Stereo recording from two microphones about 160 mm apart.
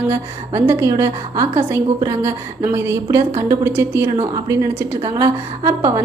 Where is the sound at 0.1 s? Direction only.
15° right (ahead or behind).